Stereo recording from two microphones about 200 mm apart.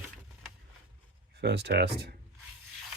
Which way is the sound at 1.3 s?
55° right (ahead or behind).